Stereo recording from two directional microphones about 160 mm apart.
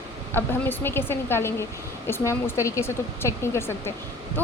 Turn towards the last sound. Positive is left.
turn(degrees=15)  # may be behind; listen again after turning